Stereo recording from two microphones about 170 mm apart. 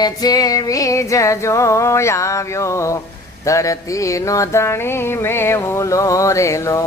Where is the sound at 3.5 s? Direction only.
20° left (ahead or behind).